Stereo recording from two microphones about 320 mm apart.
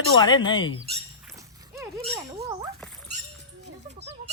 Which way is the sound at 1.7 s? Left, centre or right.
Centre.